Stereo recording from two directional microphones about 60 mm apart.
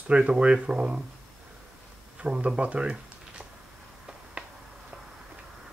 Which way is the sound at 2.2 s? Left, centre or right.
Centre.